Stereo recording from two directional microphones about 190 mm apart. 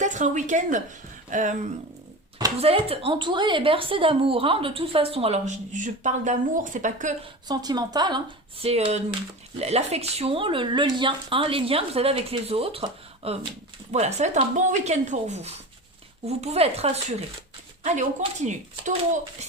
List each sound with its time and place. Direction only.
0.0 s speech: 40° right (ahead or behind)
2.6 s speech: 30° right (ahead or behind)
7.4 s speech: 20° right (ahead or behind); by 18.9 s 40° right (ahead or behind)